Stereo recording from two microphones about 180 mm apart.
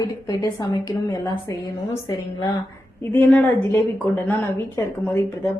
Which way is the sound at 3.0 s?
10° left (ahead or behind).